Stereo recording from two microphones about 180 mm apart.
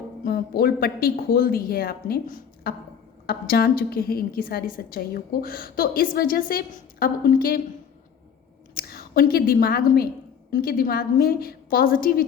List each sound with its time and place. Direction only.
0.3 s a woman's voice: 55° left (ahead or behind)
8.7 s a woman's voice: 55° left (ahead or behind)